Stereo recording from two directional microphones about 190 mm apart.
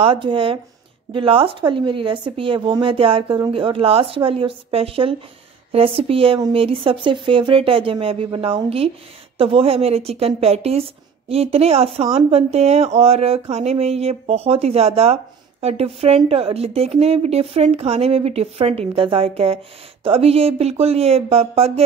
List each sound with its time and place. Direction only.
0.0 s a woman's voice: 25° right (ahead or behind)